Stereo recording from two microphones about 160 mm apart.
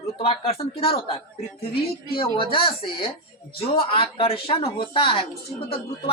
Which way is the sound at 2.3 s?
35° left (ahead or behind).